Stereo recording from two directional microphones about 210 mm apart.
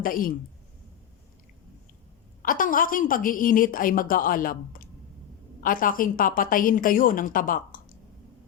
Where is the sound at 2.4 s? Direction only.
40° left (ahead or behind).